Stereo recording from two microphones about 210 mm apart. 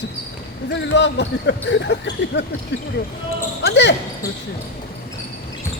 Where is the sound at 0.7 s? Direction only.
55° left (ahead or behind).